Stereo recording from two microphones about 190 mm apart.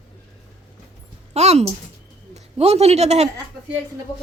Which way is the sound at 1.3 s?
35° right (ahead or behind).